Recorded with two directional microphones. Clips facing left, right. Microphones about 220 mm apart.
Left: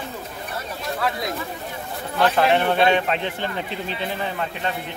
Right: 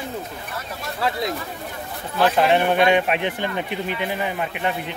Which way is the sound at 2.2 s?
15° right (ahead or behind).